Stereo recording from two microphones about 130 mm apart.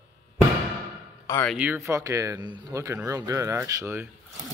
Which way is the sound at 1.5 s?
15° right (ahead or behind).